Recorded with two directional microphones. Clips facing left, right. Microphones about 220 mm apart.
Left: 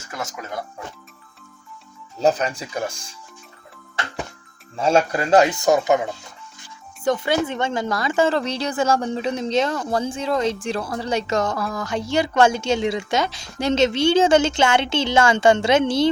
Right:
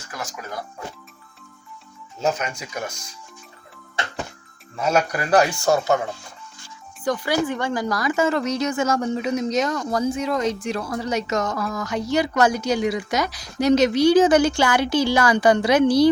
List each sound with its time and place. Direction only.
0.1 s speech: 25° left (ahead or behind)
2.2 s speech: 35° left (ahead or behind)
4.8 s speech: 30° left (ahead or behind)